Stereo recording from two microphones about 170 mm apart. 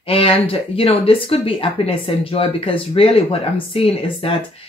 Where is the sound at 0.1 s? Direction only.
35° left (ahead or behind).